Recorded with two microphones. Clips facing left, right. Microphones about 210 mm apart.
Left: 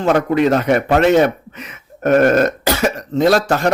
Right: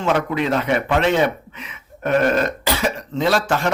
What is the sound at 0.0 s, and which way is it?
Speech, 45° left (ahead or behind).